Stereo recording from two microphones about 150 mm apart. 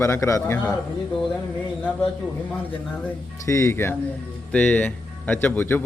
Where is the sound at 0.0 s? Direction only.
20° left (ahead or behind).